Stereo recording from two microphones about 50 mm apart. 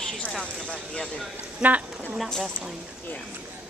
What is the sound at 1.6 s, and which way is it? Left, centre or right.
Speech, right.